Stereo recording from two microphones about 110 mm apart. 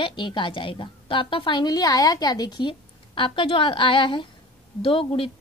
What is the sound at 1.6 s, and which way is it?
A woman's voice, 35° left (ahead or behind).